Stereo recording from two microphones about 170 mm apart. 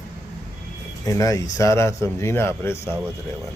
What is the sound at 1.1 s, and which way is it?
A man's voice, 20° left (ahead or behind).